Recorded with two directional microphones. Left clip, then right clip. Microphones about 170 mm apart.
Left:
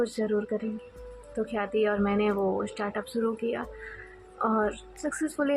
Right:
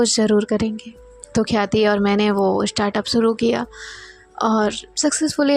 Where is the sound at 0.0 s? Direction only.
60° right (ahead or behind).